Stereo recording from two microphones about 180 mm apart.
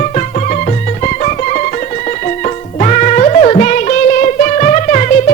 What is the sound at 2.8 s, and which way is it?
Music, 40° left (ahead or behind).